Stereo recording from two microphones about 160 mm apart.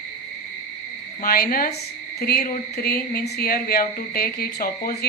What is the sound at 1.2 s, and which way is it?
Speech, 65° left (ahead or behind).